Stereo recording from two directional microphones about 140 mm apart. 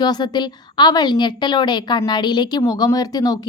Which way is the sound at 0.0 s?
30° left (ahead or behind).